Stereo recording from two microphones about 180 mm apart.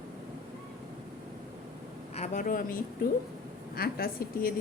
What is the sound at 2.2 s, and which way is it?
A woman's voice, 45° left (ahead or behind).